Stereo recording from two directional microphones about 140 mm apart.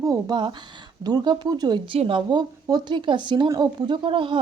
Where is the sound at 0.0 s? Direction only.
25° right (ahead or behind).